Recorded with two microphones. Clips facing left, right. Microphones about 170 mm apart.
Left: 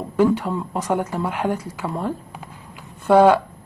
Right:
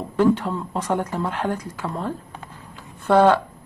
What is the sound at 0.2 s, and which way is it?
A woman's voice, 10° left (ahead or behind).